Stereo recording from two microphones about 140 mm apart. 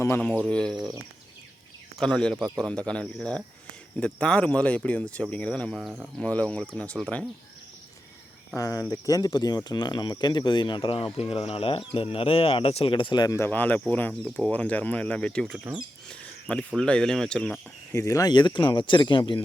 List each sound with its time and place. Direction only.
0.4 s speech: 5° left (ahead or behind)
2.0 s speech: 5° left (ahead or behind)
8.5 s speech: 25° left (ahead or behind); by 15.5 s 5° left (ahead or behind)
15.5 s speech: 10° right (ahead or behind)
16.0 s speech: 10° left (ahead or behind)
17.9 s speech: 20° left (ahead or behind)